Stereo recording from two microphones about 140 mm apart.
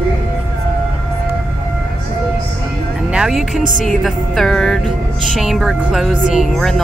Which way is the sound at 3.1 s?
5° right (ahead or behind).